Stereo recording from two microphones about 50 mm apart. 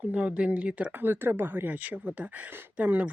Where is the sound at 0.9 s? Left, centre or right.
Right.